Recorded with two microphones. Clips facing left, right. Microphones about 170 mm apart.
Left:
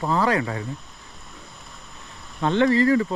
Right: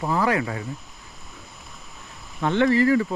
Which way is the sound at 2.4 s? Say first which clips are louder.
Left 1 dB; 20° left (ahead or behind).